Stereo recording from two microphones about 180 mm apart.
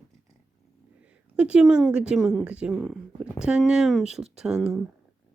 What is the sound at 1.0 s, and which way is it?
A woman's voice, 5° right (ahead or behind).